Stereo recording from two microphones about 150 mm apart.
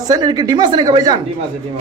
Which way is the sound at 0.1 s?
25° right (ahead or behind).